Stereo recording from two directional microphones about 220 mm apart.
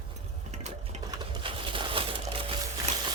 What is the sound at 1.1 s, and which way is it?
Crushing, 20° right (ahead or behind).